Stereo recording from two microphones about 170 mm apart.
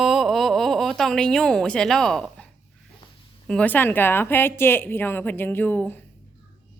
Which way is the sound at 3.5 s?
10° left (ahead or behind).